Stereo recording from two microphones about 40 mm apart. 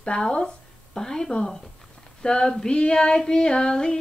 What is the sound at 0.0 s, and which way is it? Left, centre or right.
Speech, left.